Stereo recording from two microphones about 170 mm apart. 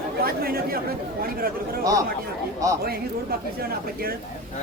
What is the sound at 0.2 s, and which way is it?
Speech, 60° right (ahead or behind).